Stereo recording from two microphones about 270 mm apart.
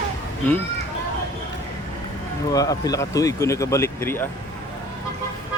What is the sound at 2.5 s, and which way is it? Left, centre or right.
Speech, centre.